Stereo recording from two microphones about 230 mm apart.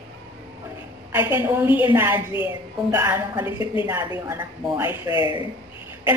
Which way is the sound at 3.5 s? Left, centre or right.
Left.